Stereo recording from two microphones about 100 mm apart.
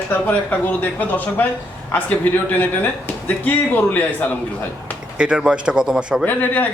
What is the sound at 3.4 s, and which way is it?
Speech, 15° left (ahead or behind).